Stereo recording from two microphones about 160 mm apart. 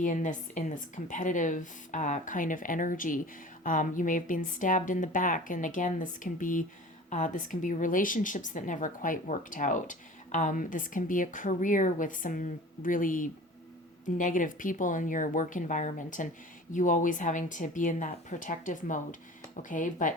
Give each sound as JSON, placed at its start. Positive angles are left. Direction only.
{"t": 0.0, "sound": "a woman's voice", "side_deg": 55}